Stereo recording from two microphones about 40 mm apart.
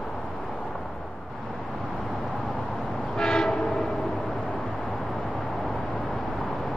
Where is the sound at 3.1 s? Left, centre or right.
Centre.